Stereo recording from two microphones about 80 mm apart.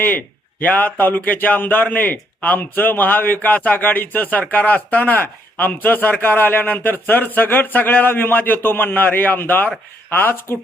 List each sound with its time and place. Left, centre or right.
0.0 s a man's voice: left